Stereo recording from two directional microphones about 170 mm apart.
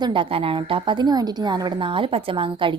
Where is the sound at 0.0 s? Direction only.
30° right (ahead or behind).